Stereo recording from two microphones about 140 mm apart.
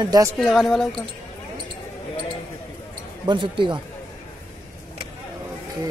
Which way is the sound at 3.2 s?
35° right (ahead or behind).